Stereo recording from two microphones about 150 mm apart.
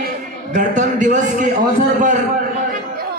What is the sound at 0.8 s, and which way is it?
Speech, 55° right (ahead or behind).